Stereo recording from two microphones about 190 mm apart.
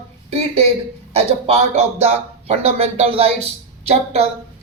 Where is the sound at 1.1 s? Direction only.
30° right (ahead or behind).